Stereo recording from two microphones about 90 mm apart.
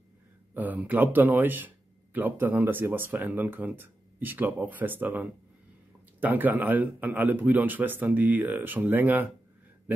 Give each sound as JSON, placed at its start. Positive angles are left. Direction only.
{"t": 0.6, "sound": "speech", "side_deg": -20}